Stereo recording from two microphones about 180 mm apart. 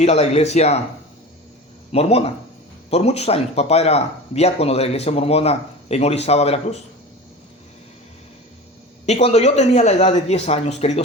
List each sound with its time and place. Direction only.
0.0 s speech: 40° left (ahead or behind)
1.9 s speech: 35° left (ahead or behind)
9.0 s speech: 35° left (ahead or behind)